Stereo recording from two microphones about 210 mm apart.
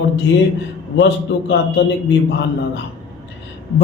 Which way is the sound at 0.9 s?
55° left (ahead or behind).